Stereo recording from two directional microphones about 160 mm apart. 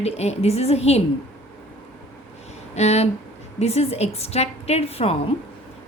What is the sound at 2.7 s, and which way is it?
A woman's voice, 45° left (ahead or behind).